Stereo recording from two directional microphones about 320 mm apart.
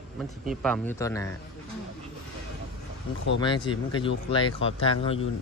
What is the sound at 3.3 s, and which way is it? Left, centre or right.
A man's voice, centre.